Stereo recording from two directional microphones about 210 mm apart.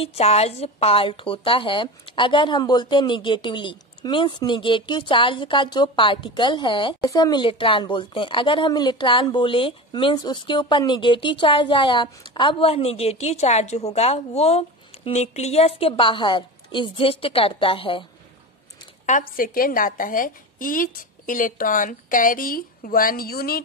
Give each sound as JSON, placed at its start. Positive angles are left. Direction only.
{"t": 0.0, "sound": "a woman's voice", "side_deg": 30}
{"t": 19.0, "sound": "a woman's voice", "side_deg": 40}